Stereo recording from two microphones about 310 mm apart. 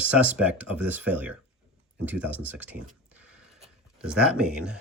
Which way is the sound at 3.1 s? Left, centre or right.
Centre.